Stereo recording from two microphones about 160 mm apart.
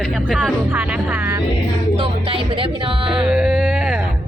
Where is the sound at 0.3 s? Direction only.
Centre (ahead or behind).